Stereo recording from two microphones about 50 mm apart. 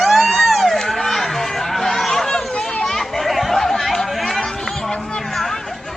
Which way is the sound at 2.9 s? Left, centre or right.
Centre.